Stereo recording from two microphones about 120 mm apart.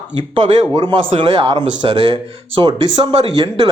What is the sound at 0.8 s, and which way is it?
Speech, 45° right (ahead or behind).